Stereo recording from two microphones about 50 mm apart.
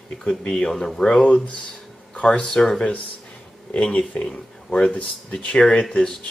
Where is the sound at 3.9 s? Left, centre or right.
Left.